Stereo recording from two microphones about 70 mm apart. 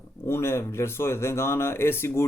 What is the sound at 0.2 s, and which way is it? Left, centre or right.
Speech, left.